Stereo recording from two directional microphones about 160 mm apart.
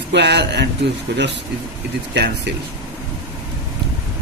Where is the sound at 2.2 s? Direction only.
90° right.